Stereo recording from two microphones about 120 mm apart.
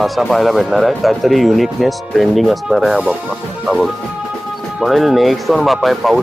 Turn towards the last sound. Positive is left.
turn(degrees=0)  # may be behind; listen again after turning